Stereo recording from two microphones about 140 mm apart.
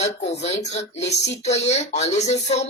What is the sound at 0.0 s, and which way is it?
Speech, 50° left (ahead or behind).